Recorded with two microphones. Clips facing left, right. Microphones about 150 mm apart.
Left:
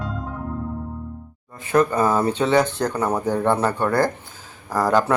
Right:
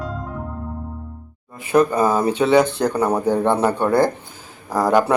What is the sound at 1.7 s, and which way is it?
Speech, 15° right (ahead or behind).